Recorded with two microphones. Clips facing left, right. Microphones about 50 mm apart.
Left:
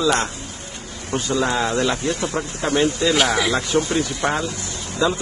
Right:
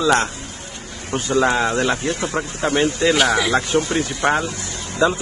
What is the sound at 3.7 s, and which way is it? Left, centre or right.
Speech, right.